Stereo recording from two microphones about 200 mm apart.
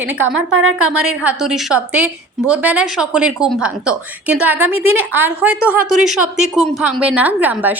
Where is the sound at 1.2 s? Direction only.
5° right (ahead or behind).